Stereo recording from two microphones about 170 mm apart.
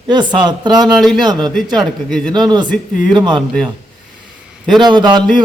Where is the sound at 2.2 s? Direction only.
25° right (ahead or behind).